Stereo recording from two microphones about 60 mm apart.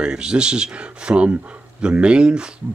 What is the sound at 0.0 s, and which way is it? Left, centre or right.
Speech, centre.